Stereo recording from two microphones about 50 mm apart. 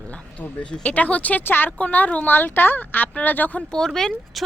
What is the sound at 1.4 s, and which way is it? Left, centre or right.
Speech, left.